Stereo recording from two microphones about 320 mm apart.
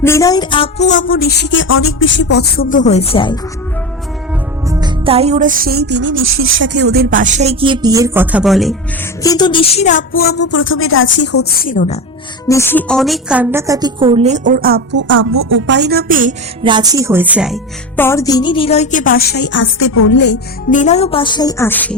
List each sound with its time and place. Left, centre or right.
0.0 s speech: centre
4.7 s music: centre
9.2 s speech: centre; by 10.3 s left
10.3 s speech: left
12.5 s music: centre; by 16.3 s right
16.6 s speech: centre